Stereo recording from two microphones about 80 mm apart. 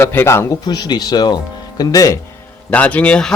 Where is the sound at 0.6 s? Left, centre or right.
Left.